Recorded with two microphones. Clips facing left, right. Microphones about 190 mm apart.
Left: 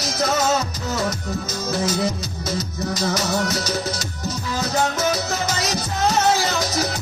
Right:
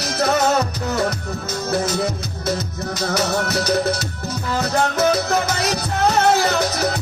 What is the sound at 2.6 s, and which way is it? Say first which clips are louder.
Music: left 1 dB; 60° right (ahead or behind).